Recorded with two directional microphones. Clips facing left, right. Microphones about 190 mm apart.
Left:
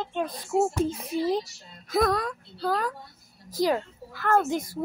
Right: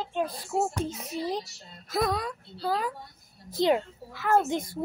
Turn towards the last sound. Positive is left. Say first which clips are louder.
# left 1 dB
turn(degrees=-25)  # may be behind; listen again after turning